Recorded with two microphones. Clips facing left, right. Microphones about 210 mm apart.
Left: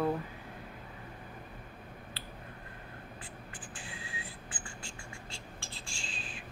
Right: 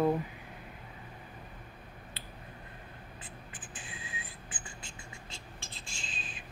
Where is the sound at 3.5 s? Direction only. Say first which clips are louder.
Left 1 dB; 20° right (ahead or behind).